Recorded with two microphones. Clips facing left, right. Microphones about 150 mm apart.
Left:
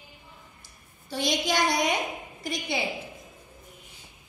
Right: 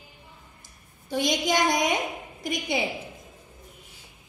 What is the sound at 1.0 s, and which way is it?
A woman's voice, 20° right (ahead or behind).